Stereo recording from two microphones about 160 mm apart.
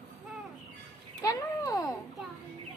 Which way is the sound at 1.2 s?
20° left (ahead or behind).